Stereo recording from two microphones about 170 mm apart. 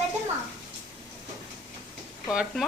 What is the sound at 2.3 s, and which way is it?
Speech, 5° right (ahead or behind).